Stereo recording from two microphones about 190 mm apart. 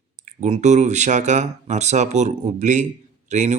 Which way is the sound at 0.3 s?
35° right (ahead or behind).